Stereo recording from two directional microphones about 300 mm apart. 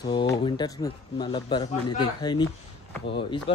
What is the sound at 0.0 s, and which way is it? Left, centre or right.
Speech, centre.